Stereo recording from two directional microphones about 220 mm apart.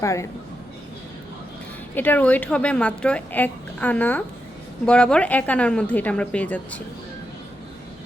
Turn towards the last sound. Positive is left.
turn(degrees=5)  # may be behind; listen again after turning